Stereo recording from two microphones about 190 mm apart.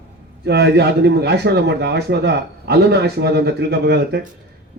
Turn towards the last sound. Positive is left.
turn(degrees=-60)  # may be behind; listen again after turning